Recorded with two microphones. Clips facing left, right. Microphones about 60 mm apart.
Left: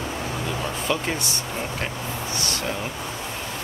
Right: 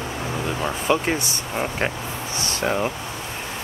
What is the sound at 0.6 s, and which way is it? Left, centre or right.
Speech, right.